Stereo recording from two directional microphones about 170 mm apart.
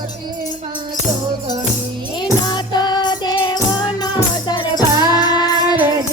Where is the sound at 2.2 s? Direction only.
25° left (ahead or behind).